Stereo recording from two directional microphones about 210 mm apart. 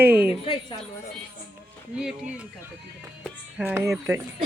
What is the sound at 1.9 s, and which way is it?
Speech, 5° right (ahead or behind).